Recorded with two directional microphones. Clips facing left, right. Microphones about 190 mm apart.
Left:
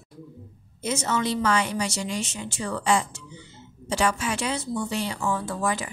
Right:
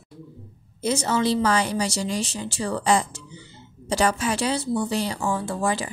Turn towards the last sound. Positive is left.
turn(degrees=-30)  # may be behind; listen again after turning